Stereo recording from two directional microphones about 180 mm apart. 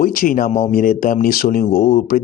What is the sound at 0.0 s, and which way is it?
Speech, 55° left (ahead or behind).